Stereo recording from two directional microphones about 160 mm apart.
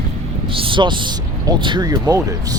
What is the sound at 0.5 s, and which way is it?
Speech, 30° right (ahead or behind).